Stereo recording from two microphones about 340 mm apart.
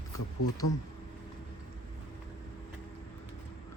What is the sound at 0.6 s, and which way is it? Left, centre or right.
Speech, left.